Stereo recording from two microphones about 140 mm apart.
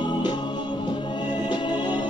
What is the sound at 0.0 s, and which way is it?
Music, 30° left (ahead or behind).